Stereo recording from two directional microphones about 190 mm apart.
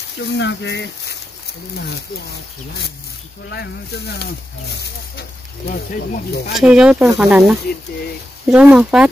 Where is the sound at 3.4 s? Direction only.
60° left (ahead or behind).